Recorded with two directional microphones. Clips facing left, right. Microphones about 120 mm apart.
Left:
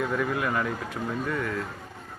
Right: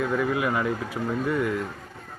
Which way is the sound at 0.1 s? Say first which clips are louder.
Right 3 dB; 5° right (ahead or behind).